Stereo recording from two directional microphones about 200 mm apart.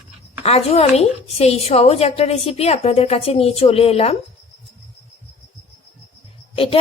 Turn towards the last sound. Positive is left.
turn(degrees=25)  # may be behind; listen again after turning